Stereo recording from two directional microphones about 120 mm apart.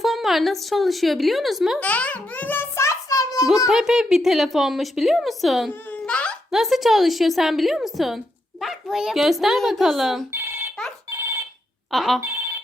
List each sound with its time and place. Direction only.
0.0 s a woman's voice: centre (ahead or behind)
1.8 s a sound: 10° left (ahead or behind); by 3.4 s 30° left (ahead or behind)
3.7 s a woman's voice: 5° right (ahead or behind)
6.1 s a sound: 10° left (ahead or behind)
6.5 s a woman's voice: centre (ahead or behind)
10.3 s telephone bell ringing: 20° right (ahead or behind)
11.9 s a woman's voice: centre (ahead or behind)
12.2 s telephone bell ringing: 20° right (ahead or behind)